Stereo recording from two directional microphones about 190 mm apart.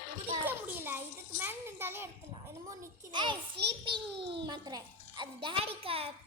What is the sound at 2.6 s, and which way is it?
A child's voice, 25° right (ahead or behind).